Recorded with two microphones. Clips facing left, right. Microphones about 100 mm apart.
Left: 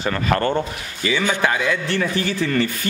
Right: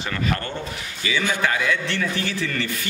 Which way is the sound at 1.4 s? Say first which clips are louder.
Left 2 dB; 15° left (ahead or behind).